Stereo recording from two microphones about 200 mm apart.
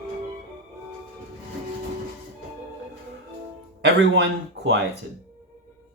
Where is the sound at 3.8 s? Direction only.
60° right (ahead or behind).